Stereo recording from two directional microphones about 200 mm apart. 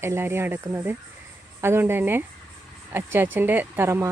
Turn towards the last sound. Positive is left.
turn(degrees=-10)  # may be behind; listen again after turning